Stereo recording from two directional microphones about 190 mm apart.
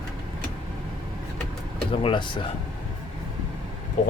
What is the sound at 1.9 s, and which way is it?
Speech, 25° left (ahead or behind).